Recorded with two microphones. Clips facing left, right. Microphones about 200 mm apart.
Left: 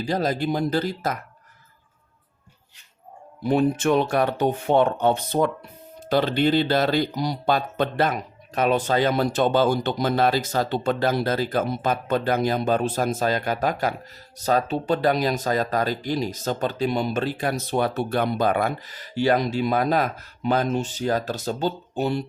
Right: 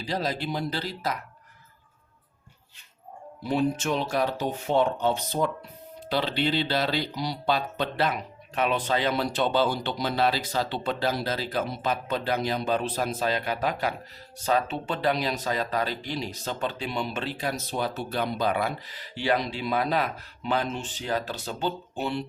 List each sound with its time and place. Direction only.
0.0 s speech: 45° left (ahead or behind)
3.4 s speech: 50° left (ahead or behind)
6.1 s speech: 45° left (ahead or behind)